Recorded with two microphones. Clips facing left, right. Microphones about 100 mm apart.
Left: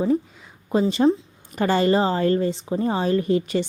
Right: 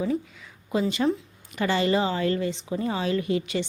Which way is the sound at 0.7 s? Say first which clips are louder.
Left 5 dB; 35° left (ahead or behind).